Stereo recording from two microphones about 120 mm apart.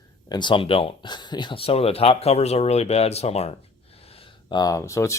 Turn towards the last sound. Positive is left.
turn(degrees=25)  # may be behind; listen again after turning